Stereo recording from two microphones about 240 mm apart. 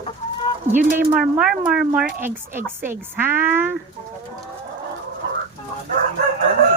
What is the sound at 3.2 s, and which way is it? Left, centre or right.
Speech, centre.